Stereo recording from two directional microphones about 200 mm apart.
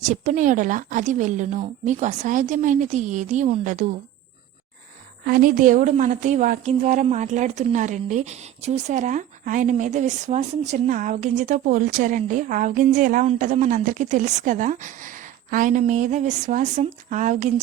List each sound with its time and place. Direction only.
0.0 s a woman's voice: 40° right (ahead or behind)
5.2 s a woman's voice: 45° right (ahead or behind)